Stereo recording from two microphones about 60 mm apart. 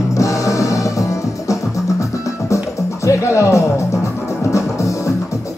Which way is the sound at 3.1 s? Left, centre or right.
Left.